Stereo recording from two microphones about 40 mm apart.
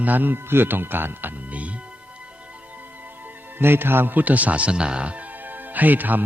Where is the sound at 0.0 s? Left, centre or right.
Right.